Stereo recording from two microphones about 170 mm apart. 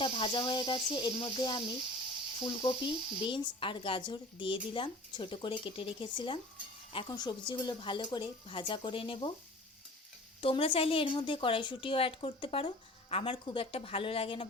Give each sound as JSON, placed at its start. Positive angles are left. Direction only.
{"t": 0.0, "sound": "speech", "side_deg": 30}
{"t": 10.4, "sound": "a woman's voice", "side_deg": 35}